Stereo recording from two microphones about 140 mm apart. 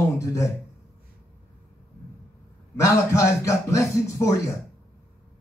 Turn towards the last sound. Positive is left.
turn(degrees=20)  # may be behind; listen again after turning